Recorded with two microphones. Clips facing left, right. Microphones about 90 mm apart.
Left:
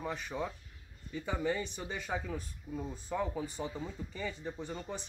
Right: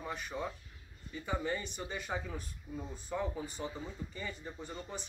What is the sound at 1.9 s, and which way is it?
Speech, 10° right (ahead or behind).